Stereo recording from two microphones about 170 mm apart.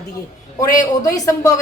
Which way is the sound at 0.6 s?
20° left (ahead or behind).